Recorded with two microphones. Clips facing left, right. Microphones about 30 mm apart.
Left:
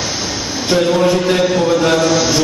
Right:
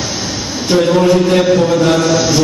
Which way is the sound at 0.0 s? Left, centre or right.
Centre.